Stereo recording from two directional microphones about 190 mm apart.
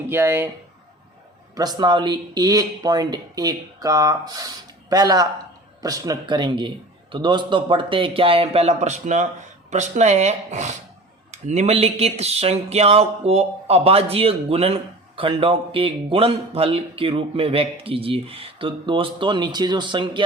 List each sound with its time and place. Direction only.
0.1 s speech: 10° right (ahead or behind)
1.5 s speech: 20° right (ahead or behind)